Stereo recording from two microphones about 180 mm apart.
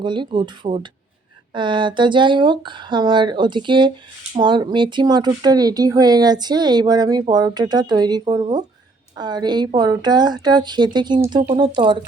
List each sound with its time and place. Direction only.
0.0 s speech: 25° right (ahead or behind)